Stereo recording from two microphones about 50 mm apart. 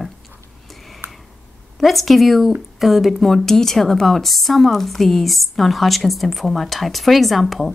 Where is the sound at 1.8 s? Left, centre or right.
Centre.